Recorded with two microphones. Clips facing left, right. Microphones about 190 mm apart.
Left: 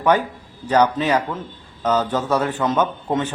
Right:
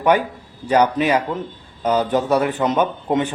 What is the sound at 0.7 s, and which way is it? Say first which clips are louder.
A man's voice: right 1 dB; 15° right (ahead or behind).